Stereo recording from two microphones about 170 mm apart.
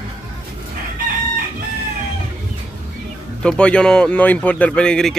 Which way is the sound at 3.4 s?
5° left (ahead or behind).